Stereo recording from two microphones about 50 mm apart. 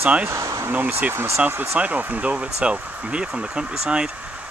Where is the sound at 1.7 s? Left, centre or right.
Right.